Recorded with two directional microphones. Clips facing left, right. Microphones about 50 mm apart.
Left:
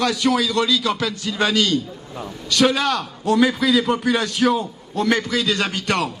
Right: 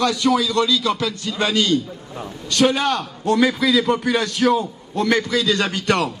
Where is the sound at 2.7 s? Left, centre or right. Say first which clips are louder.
Even; right.